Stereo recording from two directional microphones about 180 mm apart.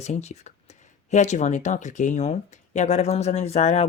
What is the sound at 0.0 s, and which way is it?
Speech, 40° left (ahead or behind).